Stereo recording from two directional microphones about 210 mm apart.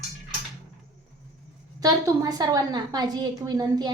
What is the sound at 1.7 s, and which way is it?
A woman's voice, 15° right (ahead or behind).